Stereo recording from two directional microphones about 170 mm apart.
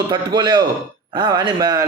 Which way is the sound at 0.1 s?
25° right (ahead or behind).